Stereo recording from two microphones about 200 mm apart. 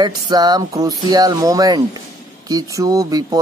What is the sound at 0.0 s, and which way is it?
Speech, 20° right (ahead or behind).